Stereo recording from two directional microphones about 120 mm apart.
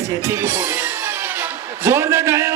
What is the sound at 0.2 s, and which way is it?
Speech, 25° right (ahead or behind).